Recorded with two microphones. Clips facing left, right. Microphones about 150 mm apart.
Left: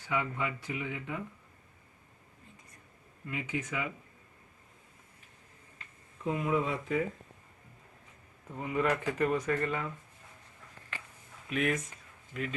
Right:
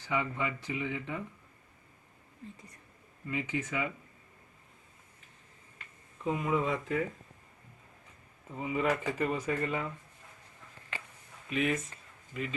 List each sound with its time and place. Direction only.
0.1 s speech: 5° left (ahead or behind)
3.2 s speech: 5° left (ahead or behind)
6.2 s speech: centre (ahead or behind)
8.5 s speech: 5° right (ahead or behind)
11.4 s speech: centre (ahead or behind)